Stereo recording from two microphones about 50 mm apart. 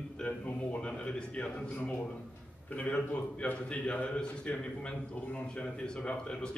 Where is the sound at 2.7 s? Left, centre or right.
Left.